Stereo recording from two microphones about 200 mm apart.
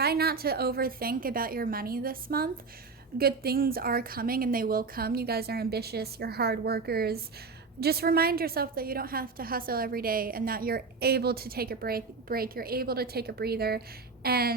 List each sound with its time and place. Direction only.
0.0 s a woman's voice: 50° right (ahead or behind)